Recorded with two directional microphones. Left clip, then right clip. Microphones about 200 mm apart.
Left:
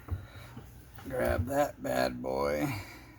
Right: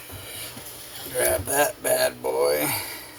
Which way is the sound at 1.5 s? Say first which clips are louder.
Right 8 dB; 45° left (ahead or behind).